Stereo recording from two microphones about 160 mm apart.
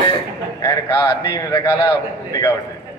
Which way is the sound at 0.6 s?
20° left (ahead or behind).